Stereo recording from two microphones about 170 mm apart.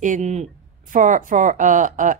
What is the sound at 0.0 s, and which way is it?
A woman's voice, 45° right (ahead or behind).